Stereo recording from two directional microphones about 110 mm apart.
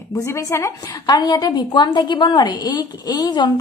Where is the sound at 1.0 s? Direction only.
40° left (ahead or behind).